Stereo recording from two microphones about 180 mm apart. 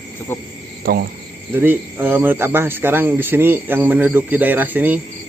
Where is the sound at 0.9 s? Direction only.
55° right (ahead or behind).